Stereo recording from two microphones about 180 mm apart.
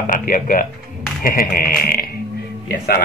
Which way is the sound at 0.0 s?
50° left (ahead or behind).